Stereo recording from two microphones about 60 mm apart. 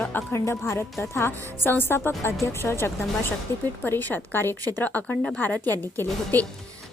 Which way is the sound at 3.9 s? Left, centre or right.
Left.